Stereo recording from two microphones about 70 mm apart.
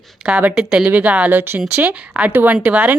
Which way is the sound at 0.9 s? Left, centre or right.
Right.